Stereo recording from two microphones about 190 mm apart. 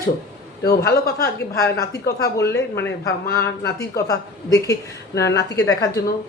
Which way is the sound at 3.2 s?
55° left (ahead or behind).